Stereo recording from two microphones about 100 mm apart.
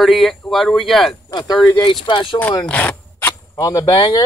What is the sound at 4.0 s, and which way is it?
Speech, 45° left (ahead or behind).